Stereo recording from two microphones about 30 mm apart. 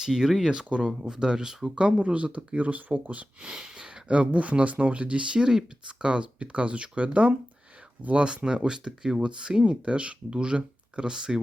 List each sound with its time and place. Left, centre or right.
0.0 s speech: centre
1.7 s speech: right
2.0 s speech: right
3.4 s a sound: right
4.1 s speech: right
5.4 s speech: centre
5.8 s speech: right
8.1 s speech: right
9.6 s speech: right
11.1 s speech: right